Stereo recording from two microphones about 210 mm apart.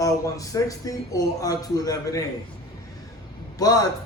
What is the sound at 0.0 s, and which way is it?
Speech, 15° left (ahead or behind).